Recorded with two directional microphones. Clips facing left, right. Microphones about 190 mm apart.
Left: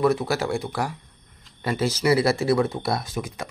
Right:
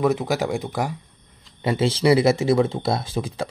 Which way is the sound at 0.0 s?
15° right (ahead or behind).